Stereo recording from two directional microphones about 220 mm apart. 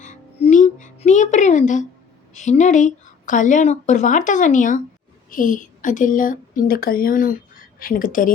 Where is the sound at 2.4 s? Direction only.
30° left (ahead or behind).